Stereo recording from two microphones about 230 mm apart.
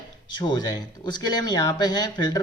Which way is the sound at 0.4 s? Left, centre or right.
Centre.